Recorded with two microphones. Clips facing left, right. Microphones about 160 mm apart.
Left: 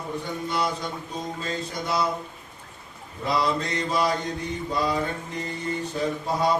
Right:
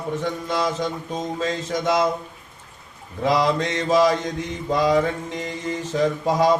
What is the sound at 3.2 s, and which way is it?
Mantra, 90° right.